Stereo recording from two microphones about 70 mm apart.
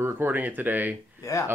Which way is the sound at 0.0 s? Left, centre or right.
Right.